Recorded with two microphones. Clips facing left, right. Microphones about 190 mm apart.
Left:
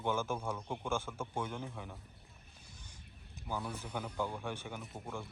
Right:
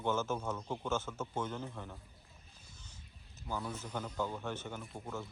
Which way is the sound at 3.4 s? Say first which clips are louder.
Even; 10° left (ahead or behind).